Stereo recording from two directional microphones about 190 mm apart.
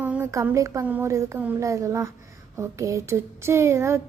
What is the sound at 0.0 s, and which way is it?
A child's voice, 10° right (ahead or behind).